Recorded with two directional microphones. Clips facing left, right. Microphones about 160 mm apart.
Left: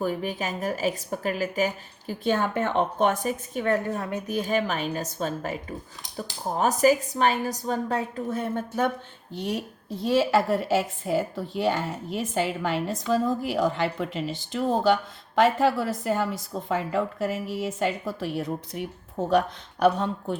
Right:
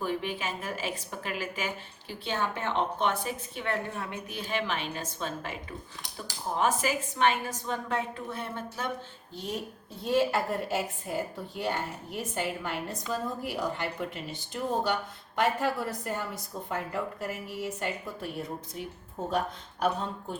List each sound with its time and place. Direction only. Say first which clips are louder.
0.0 s a woman's voice: left 4 dB; 40° left (ahead or behind)
9.3 s a woman's voice: left 7 dB; 70° left (ahead or behind)
10.0 s a woman's voice: left 5 dB; 90° left